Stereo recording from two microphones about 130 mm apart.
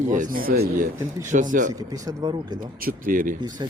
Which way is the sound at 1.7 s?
25° right (ahead or behind).